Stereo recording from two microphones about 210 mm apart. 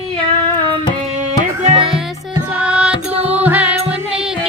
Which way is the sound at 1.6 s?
25° right (ahead or behind).